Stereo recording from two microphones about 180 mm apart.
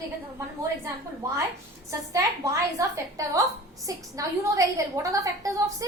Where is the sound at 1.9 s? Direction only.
20° right (ahead or behind).